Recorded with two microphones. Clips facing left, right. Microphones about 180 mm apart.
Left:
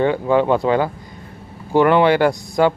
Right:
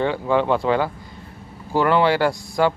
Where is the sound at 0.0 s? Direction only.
15° left (ahead or behind).